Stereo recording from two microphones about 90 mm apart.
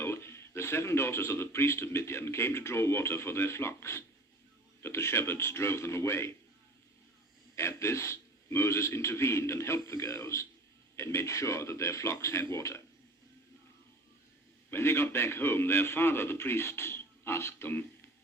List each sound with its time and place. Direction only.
0.0 s a man's voice: 30° left (ahead or behind)
7.5 s a man's voice: 30° left (ahead or behind)
14.7 s speech: 25° left (ahead or behind)